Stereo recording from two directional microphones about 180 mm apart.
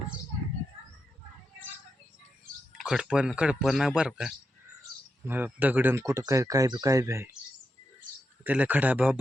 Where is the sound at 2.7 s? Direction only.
5° right (ahead or behind).